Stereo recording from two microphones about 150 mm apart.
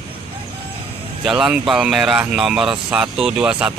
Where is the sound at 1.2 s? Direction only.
5° right (ahead or behind).